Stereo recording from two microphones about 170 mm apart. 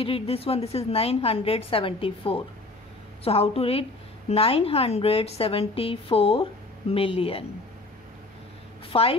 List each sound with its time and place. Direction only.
0.0 s a woman's voice: 35° left (ahead or behind)
8.9 s a woman's voice: 35° left (ahead or behind)